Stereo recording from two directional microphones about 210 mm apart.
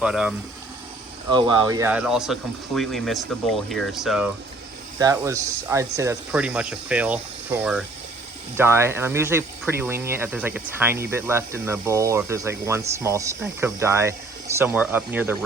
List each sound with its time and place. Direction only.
0.0 s speech: centre (ahead or behind)
1.3 s speech: 20° right (ahead or behind)
1.9 s speech: 5° right (ahead or behind)
4.9 s speech: 15° right (ahead or behind)